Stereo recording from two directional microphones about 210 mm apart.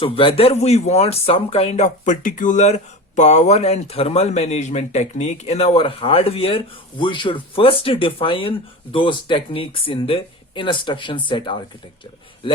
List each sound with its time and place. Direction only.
0.0 s speech: 25° left (ahead or behind)